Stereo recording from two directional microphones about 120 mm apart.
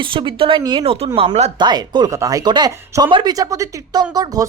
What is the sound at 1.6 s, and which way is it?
Speech, 35° right (ahead or behind).